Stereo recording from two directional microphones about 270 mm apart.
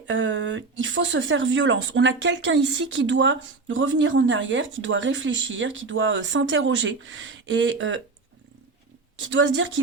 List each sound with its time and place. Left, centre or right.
0.1 s speech: right
9.4 s speech: right